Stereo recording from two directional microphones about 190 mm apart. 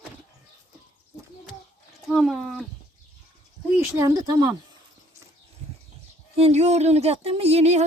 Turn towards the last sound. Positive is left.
turn(degrees=-35)  # may be behind; listen again after turning